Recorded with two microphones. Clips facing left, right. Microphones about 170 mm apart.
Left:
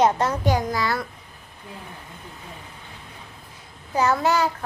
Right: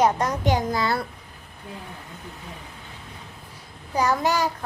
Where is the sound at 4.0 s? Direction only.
15° right (ahead or behind).